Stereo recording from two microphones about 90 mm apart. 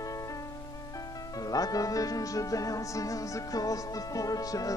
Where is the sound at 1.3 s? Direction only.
45° left (ahead or behind).